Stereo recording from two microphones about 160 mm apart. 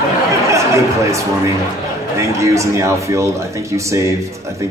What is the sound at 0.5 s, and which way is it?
A man's voice, 20° right (ahead or behind).